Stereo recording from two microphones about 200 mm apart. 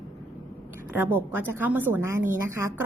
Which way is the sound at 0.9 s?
10° right (ahead or behind).